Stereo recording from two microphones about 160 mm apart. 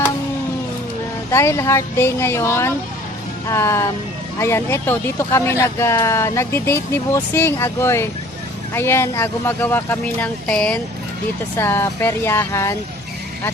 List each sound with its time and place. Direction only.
1.3 s speech: 15° left (ahead or behind)